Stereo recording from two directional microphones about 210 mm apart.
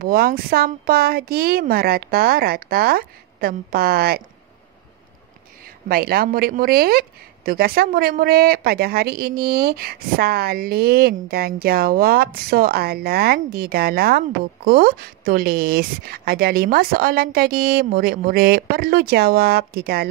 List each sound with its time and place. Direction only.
0.0 s a woman's voice: 45° right (ahead or behind)
5.6 s a woman's voice: 45° right (ahead or behind)